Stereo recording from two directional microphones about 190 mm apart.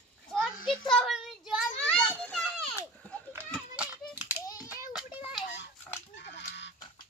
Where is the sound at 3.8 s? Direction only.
5° right (ahead or behind).